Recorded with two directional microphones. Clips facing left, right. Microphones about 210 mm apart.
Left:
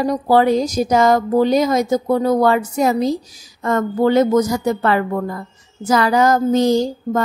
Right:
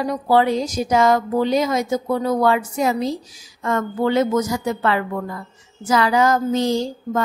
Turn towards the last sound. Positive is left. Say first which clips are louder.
# left 4 dB
turn(degrees=40)  # may be behind; listen again after turning